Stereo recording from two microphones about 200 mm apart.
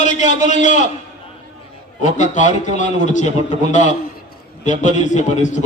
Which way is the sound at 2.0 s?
40° left (ahead or behind).